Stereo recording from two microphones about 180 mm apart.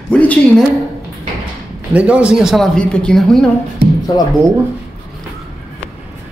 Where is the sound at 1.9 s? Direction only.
5° right (ahead or behind).